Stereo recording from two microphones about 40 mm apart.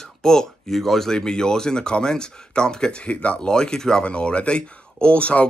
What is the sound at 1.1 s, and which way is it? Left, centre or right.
Speech, centre.